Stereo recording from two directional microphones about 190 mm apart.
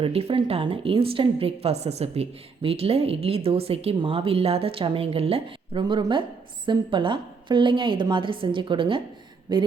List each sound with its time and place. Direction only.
0.0 s a woman's voice: 30° right (ahead or behind)